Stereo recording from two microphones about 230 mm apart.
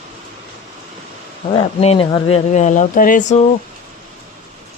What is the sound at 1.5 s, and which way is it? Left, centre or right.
Speech, left.